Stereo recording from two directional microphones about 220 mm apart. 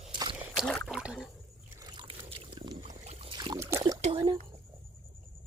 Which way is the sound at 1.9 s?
25° right (ahead or behind).